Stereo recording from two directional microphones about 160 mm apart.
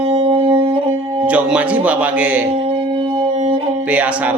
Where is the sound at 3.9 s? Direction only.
10° right (ahead or behind).